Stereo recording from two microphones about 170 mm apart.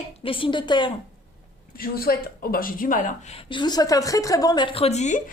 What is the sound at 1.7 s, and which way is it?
Speech, 60° left (ahead or behind).